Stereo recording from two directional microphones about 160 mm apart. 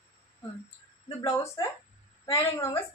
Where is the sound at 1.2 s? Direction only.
20° left (ahead or behind).